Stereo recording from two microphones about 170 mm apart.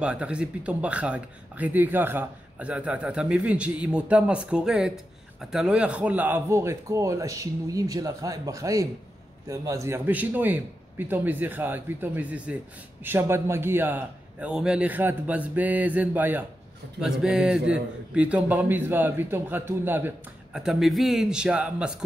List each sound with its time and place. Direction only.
0.0 s speech: 5° right (ahead or behind)
20.5 s a man's voice: centre (ahead or behind)